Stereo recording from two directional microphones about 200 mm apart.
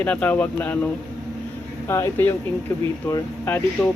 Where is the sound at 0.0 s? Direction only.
5° left (ahead or behind).